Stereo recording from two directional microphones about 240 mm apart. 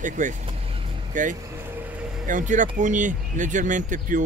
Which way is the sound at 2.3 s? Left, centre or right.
Right.